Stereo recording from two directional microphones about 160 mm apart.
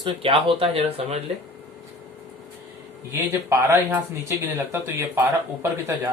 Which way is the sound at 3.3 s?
15° right (ahead or behind).